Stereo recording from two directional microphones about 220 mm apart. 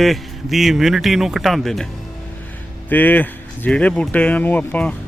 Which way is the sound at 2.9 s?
10° left (ahead or behind).